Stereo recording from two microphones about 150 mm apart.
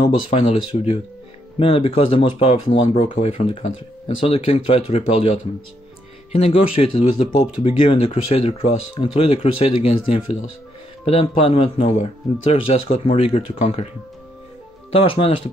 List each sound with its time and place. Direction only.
0.0 s speech: 40° left (ahead or behind)
14.9 s speech: 40° left (ahead or behind)